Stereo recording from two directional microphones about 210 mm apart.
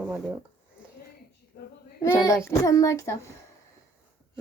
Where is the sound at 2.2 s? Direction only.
15° left (ahead or behind).